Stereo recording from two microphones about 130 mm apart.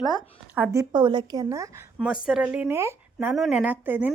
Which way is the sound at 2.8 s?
20° right (ahead or behind).